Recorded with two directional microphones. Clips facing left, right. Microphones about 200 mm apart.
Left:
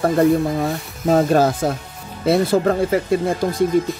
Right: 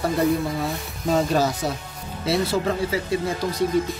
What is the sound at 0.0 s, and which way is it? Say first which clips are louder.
Speech: left 6 dB; 55° left (ahead or behind).